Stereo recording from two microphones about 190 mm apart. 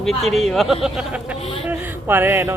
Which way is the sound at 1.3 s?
30° left (ahead or behind).